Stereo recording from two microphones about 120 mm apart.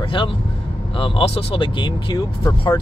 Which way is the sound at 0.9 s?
45° left (ahead or behind).